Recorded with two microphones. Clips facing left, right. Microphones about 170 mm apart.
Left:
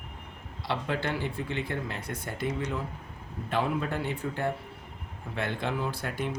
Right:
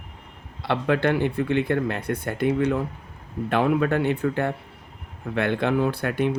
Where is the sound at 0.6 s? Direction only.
60° right (ahead or behind).